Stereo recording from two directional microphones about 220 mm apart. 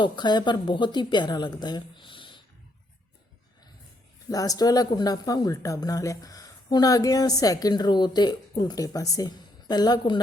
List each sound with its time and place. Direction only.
0.0 s a woman's voice: 20° left (ahead or behind)
4.3 s speech: 15° left (ahead or behind)